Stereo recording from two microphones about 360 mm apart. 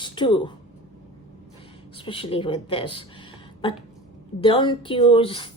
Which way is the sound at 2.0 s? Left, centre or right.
Centre.